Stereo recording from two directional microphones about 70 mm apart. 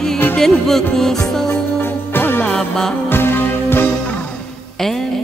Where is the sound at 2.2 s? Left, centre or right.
Left.